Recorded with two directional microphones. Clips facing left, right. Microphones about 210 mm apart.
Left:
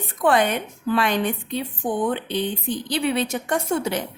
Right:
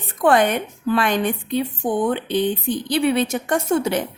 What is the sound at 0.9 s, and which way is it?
Speech, 50° right (ahead or behind).